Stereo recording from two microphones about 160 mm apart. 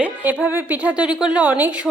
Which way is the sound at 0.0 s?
10° right (ahead or behind).